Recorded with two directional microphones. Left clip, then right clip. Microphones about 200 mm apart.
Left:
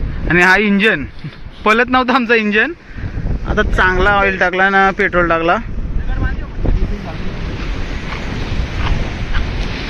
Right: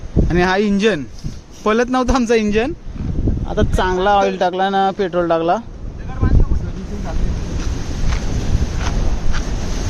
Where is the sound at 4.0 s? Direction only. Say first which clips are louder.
Left 2 dB; 20° left (ahead or behind).